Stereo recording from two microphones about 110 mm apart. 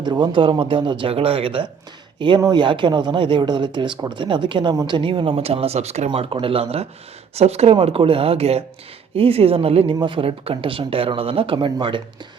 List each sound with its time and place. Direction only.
0.0 s speech: 45° right (ahead or behind); by 6.1 s 75° right (ahead or behind)
6.1 s speech: 60° right (ahead or behind)
7.3 s speech: 70° right (ahead or behind)
9.9 s speech: 45° right (ahead or behind)